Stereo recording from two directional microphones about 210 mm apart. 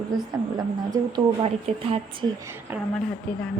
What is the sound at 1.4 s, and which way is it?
Speech, 25° right (ahead or behind).